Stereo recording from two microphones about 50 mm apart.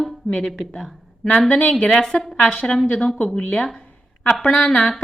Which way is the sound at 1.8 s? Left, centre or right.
Centre.